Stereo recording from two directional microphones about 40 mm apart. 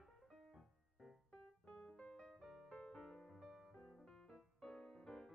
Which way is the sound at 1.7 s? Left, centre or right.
Left.